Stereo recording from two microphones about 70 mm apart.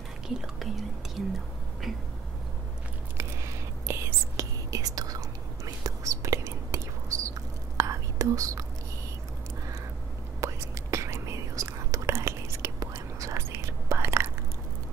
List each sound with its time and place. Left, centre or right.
0.4 s whispering: centre
3.8 s whispering: right
5.9 s whispering: right
10.4 s whispering: right